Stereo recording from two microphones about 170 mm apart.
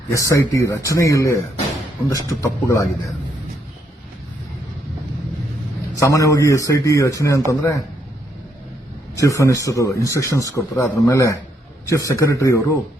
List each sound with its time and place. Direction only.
0.1 s a man's voice: 20° left (ahead or behind)
6.0 s a man's voice: 20° left (ahead or behind)
9.2 s a man's voice: 20° left (ahead or behind)